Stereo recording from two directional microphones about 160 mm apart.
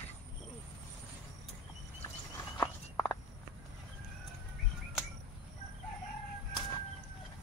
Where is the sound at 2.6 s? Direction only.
20° left (ahead or behind).